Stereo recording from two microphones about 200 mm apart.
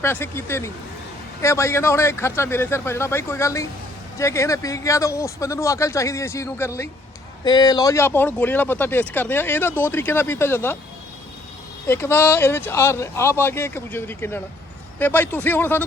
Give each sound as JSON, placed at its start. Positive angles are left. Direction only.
{"t": 0.0, "sound": "speech", "side_deg": 10}
{"t": 11.9, "sound": "speech", "side_deg": 10}